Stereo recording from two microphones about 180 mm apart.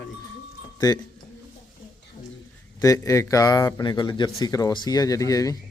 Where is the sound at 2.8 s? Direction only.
15° left (ahead or behind).